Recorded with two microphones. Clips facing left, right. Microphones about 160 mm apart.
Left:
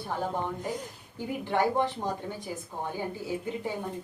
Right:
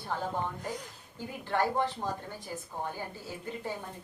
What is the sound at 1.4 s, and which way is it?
A woman's voice, 15° left (ahead or behind).